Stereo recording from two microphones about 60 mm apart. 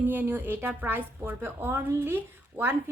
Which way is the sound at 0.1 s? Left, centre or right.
Right.